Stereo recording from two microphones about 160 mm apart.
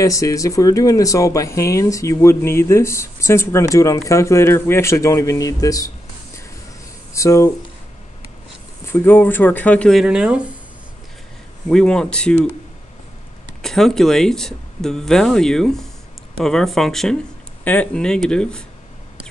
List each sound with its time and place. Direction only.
0.0 s speech: 20° left (ahead or behind)
7.2 s speech: 20° left (ahead or behind)
8.8 s speech: 15° left (ahead or behind); by 10.5 s 5° right (ahead or behind)
11.7 s speech: 5° left (ahead or behind)
13.6 s speech: centre (ahead or behind)